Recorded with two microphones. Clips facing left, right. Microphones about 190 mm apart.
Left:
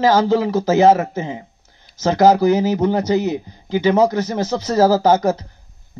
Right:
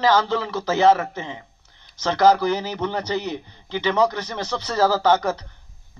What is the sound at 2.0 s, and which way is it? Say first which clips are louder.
A man's voice: left 4 dB; 40° left (ahead or behind).